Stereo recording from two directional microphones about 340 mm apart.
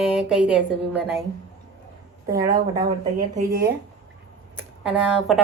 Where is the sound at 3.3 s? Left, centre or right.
Right.